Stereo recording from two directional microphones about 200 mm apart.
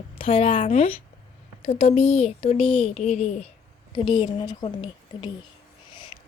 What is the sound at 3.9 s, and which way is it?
A woman's voice, 25° left (ahead or behind).